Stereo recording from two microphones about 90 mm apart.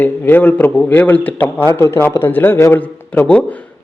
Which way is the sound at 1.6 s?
30° left (ahead or behind).